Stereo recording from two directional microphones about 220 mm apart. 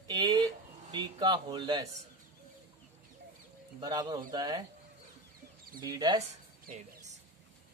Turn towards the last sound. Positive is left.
turn(degrees=-40)  # may be behind; listen again after turning